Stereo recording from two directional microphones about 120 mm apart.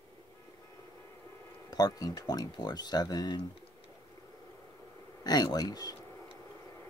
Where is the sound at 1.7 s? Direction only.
30° left (ahead or behind).